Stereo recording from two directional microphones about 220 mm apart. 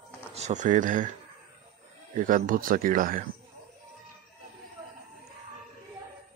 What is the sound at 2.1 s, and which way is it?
Speech, 35° right (ahead or behind).